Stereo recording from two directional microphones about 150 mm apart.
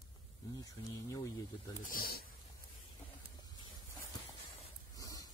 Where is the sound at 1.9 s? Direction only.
90° left.